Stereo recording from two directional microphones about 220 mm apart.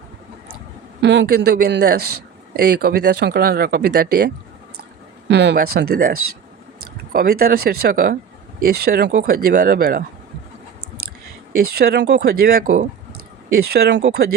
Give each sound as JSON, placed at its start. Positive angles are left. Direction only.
{"t": 1.0, "sound": "speech", "side_deg": -55}
{"t": 5.3, "sound": "speech", "side_deg": -50}
{"t": 11.5, "sound": "speech", "side_deg": -45}